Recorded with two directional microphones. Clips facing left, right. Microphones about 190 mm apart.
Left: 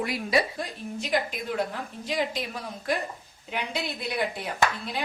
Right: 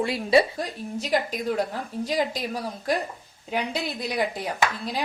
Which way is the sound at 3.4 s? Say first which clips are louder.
Right 4 dB; 40° right (ahead or behind).